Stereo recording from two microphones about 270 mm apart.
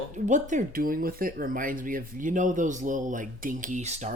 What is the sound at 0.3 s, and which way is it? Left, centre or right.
Speech, right.